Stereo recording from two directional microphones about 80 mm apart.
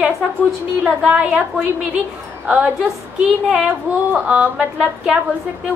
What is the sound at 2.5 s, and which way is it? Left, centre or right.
Speech, centre.